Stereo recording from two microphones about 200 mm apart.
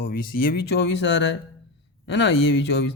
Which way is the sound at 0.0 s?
45° left (ahead or behind).